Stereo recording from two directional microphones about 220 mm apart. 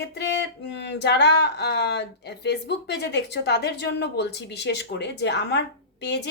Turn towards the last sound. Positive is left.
turn(degrees=50)  # may be behind; listen again after turning